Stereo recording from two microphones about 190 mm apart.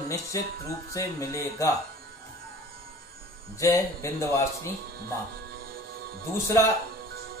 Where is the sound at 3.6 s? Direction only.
15° left (ahead or behind).